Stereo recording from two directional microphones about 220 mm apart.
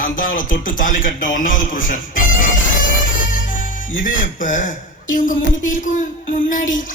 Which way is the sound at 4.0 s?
40° left (ahead or behind).